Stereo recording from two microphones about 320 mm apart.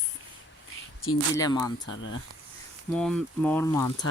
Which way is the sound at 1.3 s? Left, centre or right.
Centre.